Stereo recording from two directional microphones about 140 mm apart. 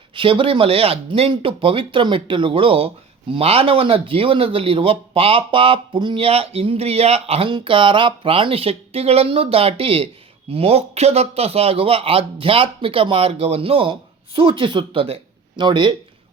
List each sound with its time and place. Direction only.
0.1 s a man's voice: 35° right (ahead or behind)